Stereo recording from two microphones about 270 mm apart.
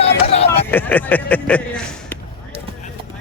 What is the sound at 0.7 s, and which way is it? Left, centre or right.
Speech, centre.